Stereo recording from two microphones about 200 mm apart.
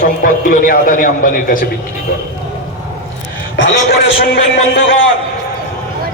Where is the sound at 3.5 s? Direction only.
65° left (ahead or behind).